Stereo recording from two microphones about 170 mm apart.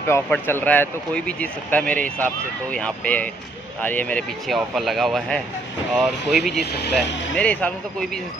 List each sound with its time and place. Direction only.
0.0 s speech: 15° left (ahead or behind)
6.6 s speech: 70° left (ahead or behind)
7.3 s speech: 5° left (ahead or behind)